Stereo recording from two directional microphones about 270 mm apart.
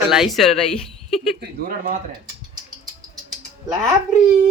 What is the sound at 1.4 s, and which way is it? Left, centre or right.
Speech, right.